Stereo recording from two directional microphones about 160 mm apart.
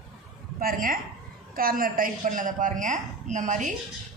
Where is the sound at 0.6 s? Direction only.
65° right (ahead or behind).